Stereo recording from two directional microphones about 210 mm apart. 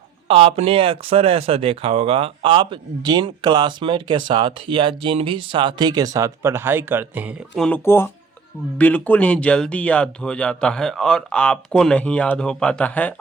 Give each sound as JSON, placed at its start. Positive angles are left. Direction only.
{"t": 0.3, "sound": "speech", "side_deg": -25}